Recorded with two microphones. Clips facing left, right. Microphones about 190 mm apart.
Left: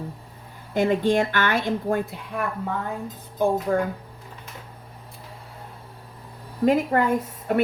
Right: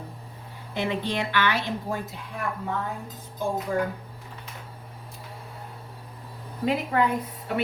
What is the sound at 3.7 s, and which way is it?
Speech, 55° left (ahead or behind).